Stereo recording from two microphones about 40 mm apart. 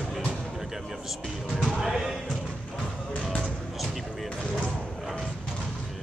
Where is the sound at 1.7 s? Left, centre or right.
Centre.